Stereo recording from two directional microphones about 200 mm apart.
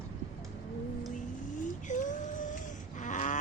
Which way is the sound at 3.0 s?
40° left (ahead or behind).